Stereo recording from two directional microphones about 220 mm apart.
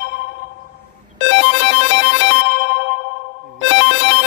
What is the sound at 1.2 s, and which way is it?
Music, 55° left (ahead or behind).